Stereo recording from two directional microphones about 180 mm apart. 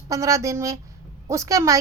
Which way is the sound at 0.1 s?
15° right (ahead or behind).